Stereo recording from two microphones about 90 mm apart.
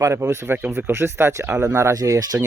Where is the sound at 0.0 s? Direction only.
30° right (ahead or behind).